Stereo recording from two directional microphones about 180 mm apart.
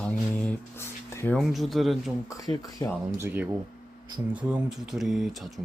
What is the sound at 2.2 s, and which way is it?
Speech, 20° left (ahead or behind).